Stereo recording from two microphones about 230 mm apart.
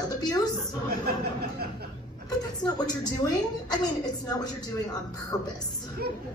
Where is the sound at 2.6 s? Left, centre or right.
Centre.